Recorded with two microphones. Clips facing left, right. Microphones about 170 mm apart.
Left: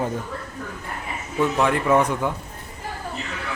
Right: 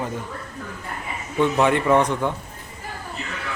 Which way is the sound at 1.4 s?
Centre (ahead or behind).